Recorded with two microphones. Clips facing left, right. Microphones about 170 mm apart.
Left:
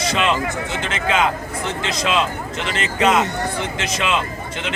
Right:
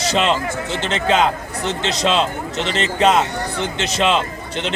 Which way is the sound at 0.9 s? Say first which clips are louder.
Right 4 dB; 35° right (ahead or behind).